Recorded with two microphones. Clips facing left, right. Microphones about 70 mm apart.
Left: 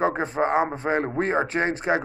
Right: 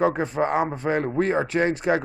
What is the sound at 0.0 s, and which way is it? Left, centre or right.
A man's voice, left.